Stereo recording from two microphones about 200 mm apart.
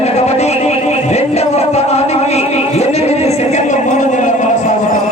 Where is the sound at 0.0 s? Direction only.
35° left (ahead or behind).